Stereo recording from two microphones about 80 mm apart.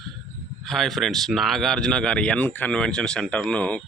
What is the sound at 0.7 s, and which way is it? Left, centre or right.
Speech, centre.